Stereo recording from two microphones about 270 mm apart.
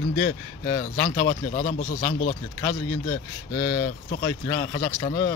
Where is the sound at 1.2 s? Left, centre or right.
Left.